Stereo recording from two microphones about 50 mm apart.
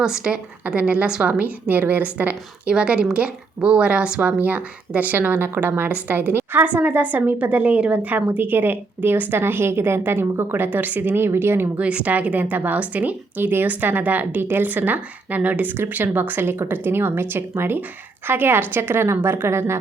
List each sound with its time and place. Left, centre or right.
0.0 s a woman's voice: centre
0.8 s a woman's voice: right
2.6 s a woman's voice: right
8.4 s a woman's voice: right
9.4 s speech: right
10.7 s speech: right
11.8 s a woman's voice: right